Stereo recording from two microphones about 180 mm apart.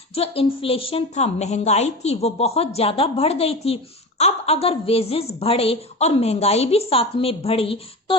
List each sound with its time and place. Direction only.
0.1 s a woman's voice: 30° left (ahead or behind)